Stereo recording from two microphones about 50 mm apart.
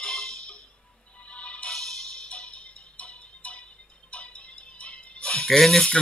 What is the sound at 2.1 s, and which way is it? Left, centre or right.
Music, centre.